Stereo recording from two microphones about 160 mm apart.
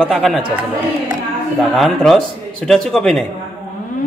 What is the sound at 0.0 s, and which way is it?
Speech, centre (ahead or behind).